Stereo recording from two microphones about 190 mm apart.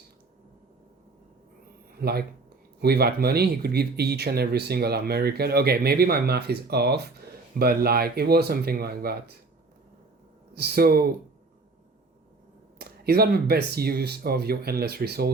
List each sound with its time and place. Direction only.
2.0 s speech: 55° right (ahead or behind)
10.5 s speech: 55° right (ahead or behind)
12.8 s speech: 55° right (ahead or behind)